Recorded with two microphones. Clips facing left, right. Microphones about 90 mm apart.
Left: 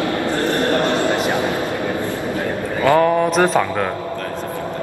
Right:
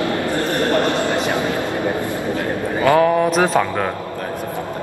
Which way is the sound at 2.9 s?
Centre (ahead or behind).